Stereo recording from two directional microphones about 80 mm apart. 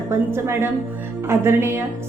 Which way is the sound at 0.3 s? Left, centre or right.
Right.